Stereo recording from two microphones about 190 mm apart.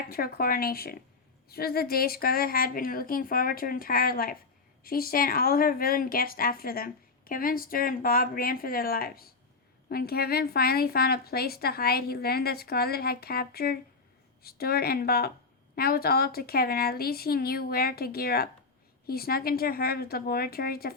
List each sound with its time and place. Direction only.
0.1 s speech: 50° left (ahead or behind)